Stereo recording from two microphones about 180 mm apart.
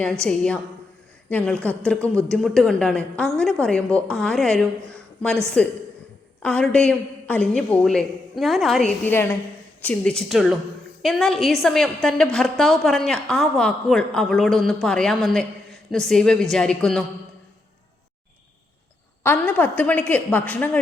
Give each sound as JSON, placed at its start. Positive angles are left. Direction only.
{"t": 0.3, "sound": "a woman's voice", "side_deg": 5}
{"t": 2.0, "sound": "speech", "side_deg": -15}
{"t": 2.3, "sound": "a woman's voice", "side_deg": 0}
{"t": 19.2, "sound": "a woman's voice", "side_deg": 10}